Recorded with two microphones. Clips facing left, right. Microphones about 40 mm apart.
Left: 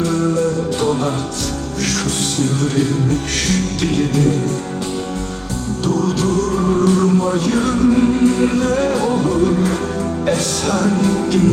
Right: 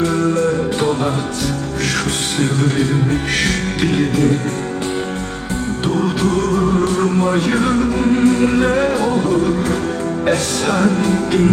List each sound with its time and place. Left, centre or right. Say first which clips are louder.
0.1 s music: right 1 dB; right
2.4 s music: right 1 dB; right
5.8 s music: even; right; by 9.6 s centre
10.7 s music: right 1 dB; right